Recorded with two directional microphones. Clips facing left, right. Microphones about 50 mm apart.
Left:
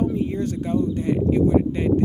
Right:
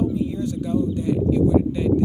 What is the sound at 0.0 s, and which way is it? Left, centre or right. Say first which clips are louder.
Speech: even; left.